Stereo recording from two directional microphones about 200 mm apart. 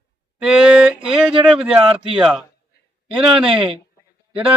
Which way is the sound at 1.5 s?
5° right (ahead or behind).